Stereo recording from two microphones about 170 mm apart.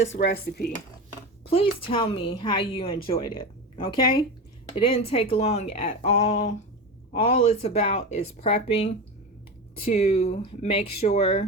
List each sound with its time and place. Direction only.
0.0 s speech: 75° left (ahead or behind)
1.5 s a woman's voice: 35° left (ahead or behind)